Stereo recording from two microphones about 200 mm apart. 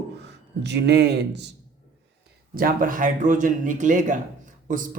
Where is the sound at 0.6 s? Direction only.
60° right (ahead or behind).